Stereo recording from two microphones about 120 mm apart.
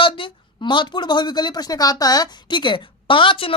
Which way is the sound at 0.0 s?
45° left (ahead or behind).